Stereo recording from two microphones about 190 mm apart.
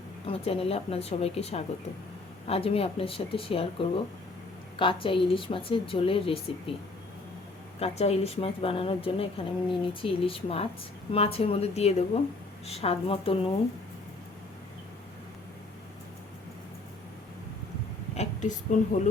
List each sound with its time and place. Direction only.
0.3 s a woman's voice: 30° left (ahead or behind)
7.8 s a woman's voice: 35° left (ahead or behind)
18.1 s a woman's voice: 35° left (ahead or behind)